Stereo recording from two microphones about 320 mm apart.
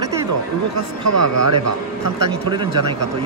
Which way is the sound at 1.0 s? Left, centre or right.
Right.